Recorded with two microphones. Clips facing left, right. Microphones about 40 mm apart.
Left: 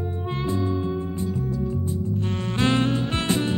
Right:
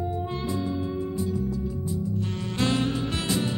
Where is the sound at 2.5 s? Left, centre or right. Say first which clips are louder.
Left 3 dB; left.